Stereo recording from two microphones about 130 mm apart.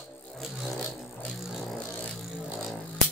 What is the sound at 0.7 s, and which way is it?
Vehicle, 10° left (ahead or behind).